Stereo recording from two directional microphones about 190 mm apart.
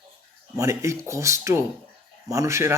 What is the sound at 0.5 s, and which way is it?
A man's voice, 15° right (ahead or behind).